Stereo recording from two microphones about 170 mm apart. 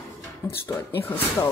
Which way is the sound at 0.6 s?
10° left (ahead or behind).